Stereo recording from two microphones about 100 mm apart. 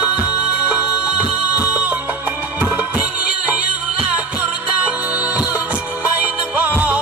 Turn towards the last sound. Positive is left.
turn(degrees=-15)  # may be behind; listen again after turning